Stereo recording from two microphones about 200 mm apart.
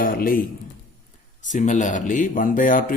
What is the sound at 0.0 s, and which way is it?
A man's voice, 45° left (ahead or behind).